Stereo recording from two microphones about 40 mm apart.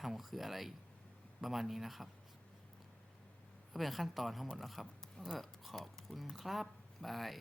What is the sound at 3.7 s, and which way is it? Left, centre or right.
Speech, centre.